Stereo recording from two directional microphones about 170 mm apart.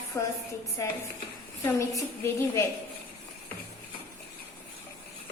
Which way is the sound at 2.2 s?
15° left (ahead or behind).